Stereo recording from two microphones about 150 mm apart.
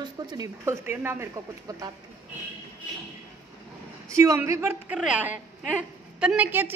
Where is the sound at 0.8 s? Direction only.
15° right (ahead or behind).